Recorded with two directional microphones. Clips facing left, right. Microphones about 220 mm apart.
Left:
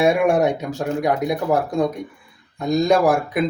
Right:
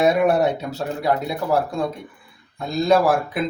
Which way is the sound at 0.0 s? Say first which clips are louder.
Left 1 dB; 10° left (ahead or behind).